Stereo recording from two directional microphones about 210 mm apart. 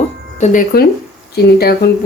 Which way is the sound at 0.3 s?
35° left (ahead or behind).